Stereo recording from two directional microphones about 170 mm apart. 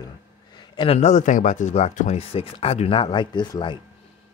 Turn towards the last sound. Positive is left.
turn(degrees=25)  # may be behind; listen again after turning